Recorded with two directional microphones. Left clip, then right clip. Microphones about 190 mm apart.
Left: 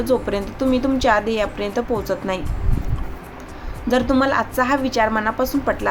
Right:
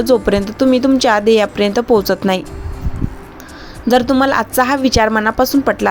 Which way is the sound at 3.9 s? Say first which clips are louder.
Right 5 dB; 40° right (ahead or behind).